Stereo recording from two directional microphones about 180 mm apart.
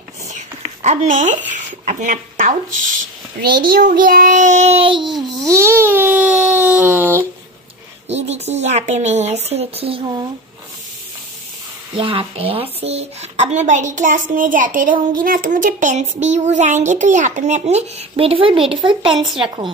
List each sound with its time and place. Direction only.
0.8 s speech: 45° right (ahead or behind)
3.3 s a child's voice: 55° right (ahead or behind); by 5.1 s 30° right (ahead or behind)
5.5 s speech: 15° right (ahead or behind)
8.1 s a woman's voice: 35° right (ahead or behind)
11.9 s a woman's voice: 30° right (ahead or behind)
19.1 s speech: centre (ahead or behind)